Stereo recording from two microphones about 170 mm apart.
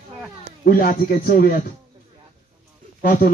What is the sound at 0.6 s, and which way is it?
A man's voice, 55° left (ahead or behind).